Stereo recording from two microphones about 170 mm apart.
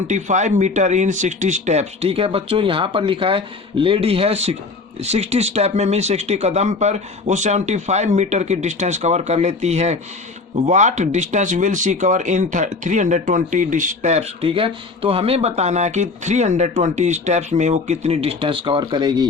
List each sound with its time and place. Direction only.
0.1 s speech: 45° right (ahead or behind); by 19.3 s 25° right (ahead or behind)